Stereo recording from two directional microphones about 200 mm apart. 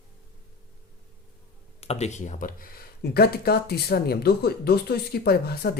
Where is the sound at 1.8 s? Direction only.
30° left (ahead or behind).